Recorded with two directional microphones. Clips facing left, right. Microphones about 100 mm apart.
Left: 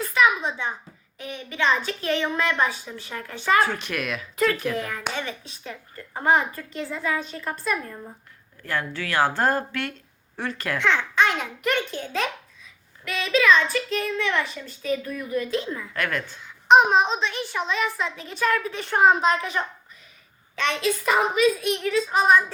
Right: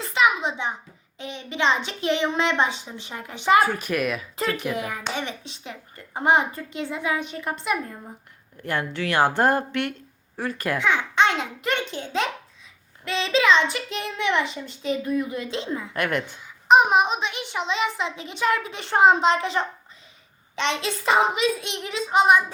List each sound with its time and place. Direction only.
0.0 s a sound: 20° right (ahead or behind)
1.2 s a child's voice: 25° right (ahead or behind)
11.1 s a child's voice: 25° right (ahead or behind)
16.6 s a child's voice: 5° right (ahead or behind)